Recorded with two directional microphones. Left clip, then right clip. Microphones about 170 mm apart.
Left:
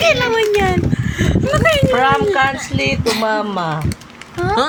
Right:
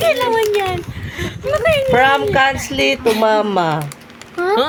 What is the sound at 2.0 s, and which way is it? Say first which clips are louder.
Speech: right 1 dB; 55° right (ahead or behind).